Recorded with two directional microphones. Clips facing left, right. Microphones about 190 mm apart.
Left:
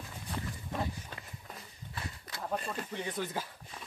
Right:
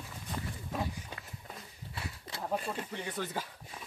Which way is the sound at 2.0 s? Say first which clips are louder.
Even; 5° right (ahead or behind).